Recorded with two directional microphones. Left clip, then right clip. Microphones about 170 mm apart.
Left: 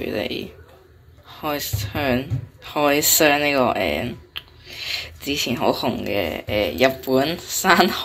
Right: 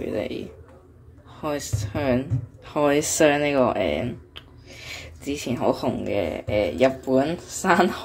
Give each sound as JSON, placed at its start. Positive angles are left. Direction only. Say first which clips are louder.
{"t": 0.0, "sound": "speech", "louder": "left 3 dB", "side_deg": -10}